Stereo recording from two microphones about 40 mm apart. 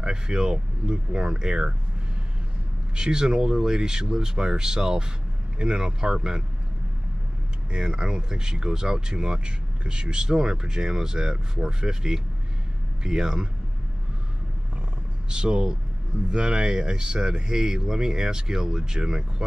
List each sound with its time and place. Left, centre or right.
0.0 s speech: right
2.9 s speech: centre
7.7 s speech: right
15.2 s speech: right